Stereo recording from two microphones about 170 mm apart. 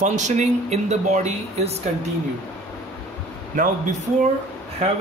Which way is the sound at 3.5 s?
50° right (ahead or behind).